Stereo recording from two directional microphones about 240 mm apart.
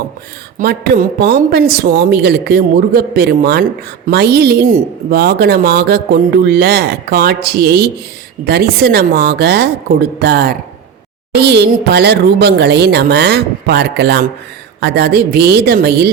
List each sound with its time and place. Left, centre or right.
0.6 s a woman's voice: right